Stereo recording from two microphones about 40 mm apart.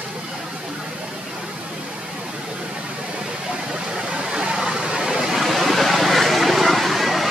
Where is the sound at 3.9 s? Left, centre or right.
Centre.